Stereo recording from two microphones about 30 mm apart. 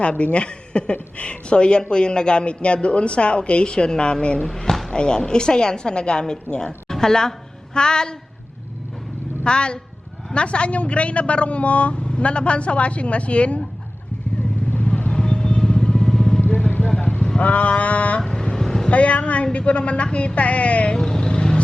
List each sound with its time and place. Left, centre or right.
0.0 s speech: left
4.4 s speech: centre
4.9 s a woman's voice: left
6.8 s a woman's voice: centre
9.4 s a woman's voice: left
15.1 s vehicle: left
17.3 s speech: left
18.5 s vehicle: centre
18.9 s speech: left
20.9 s speech: left
21.2 s vehicle: left